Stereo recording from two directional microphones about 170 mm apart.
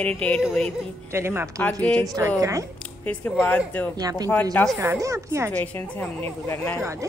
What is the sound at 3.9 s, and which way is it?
Speech, 25° right (ahead or behind).